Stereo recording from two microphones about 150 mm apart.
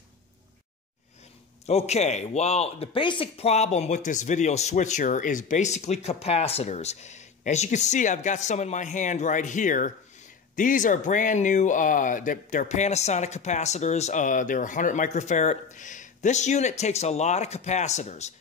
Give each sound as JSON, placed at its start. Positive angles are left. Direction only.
{"t": 1.7, "sound": "speech", "side_deg": 45}